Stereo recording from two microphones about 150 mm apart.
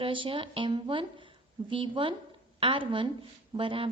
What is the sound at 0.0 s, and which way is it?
A woman's voice, 35° right (ahead or behind).